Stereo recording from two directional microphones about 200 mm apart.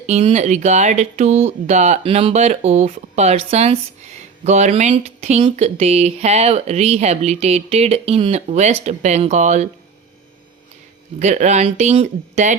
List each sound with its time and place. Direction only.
0.0 s speech: 30° right (ahead or behind)
11.2 s speech: 35° right (ahead or behind)